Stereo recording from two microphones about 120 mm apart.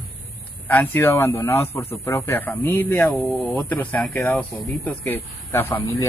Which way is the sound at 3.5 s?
15° left (ahead or behind).